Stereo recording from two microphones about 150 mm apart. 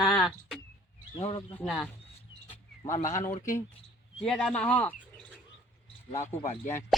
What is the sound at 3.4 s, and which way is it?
Speech, 20° left (ahead or behind).